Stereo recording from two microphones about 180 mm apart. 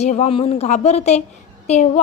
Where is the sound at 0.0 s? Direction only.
40° left (ahead or behind).